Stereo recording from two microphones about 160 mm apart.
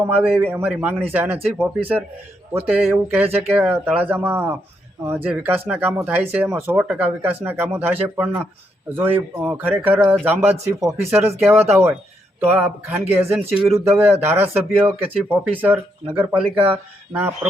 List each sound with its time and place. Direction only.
0.0 s a man's voice: 5° right (ahead or behind)